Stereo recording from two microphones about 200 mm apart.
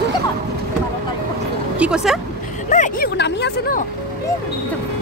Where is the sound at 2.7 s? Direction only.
40° left (ahead or behind).